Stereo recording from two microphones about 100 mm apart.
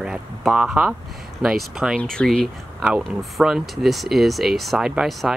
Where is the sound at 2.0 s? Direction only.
5° left (ahead or behind).